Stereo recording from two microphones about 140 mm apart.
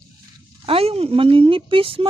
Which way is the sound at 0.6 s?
45° right (ahead or behind).